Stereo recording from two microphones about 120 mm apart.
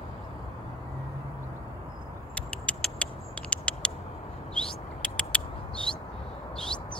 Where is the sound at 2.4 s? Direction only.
10° left (ahead or behind).